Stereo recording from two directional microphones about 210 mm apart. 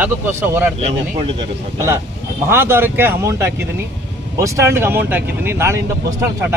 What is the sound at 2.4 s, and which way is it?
Speech, 10° right (ahead or behind).